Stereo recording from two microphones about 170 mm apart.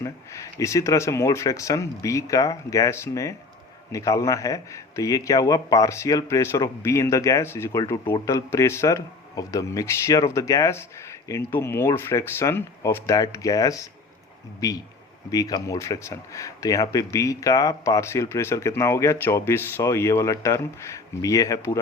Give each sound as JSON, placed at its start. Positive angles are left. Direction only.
{"t": 0.0, "sound": "a man's voice", "side_deg": 20}